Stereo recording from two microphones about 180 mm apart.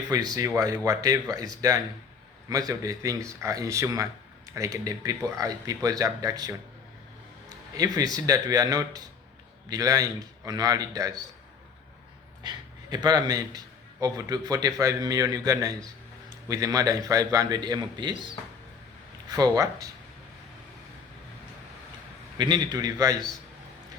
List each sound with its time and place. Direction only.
0.1 s speech: 20° right (ahead or behind)
7.8 s speech: 20° right (ahead or behind)
12.4 s speech: 25° right (ahead or behind)
19.4 s speech: 20° right (ahead or behind)
22.4 s speech: 25° right (ahead or behind)